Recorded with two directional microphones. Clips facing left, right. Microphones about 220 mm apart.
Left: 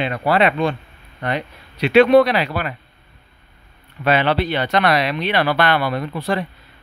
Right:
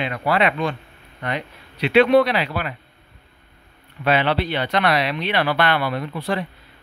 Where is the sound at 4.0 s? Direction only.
45° left (ahead or behind).